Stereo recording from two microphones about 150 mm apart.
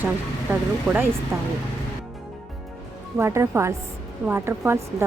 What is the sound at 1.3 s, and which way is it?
Speech, 20° right (ahead or behind).